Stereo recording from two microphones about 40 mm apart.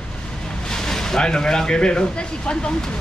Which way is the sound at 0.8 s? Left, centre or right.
Centre.